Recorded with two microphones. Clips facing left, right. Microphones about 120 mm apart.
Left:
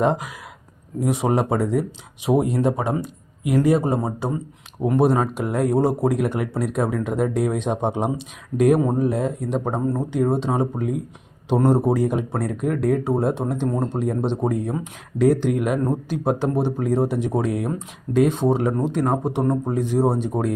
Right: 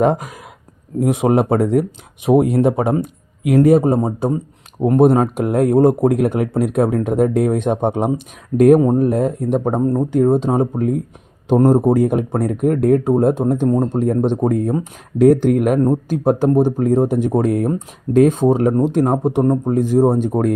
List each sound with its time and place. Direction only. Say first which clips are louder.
0.0 s a man's voice: right 5 dB; 50° right (ahead or behind)
19.7 s a man's voice: right 8 dB; 45° right (ahead or behind)